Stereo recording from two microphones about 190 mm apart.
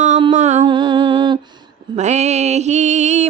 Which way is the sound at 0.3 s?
35° right (ahead or behind).